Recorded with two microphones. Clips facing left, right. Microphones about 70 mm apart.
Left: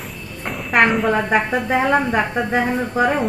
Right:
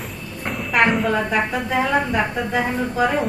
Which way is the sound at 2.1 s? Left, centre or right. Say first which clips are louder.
Left 2 dB; left.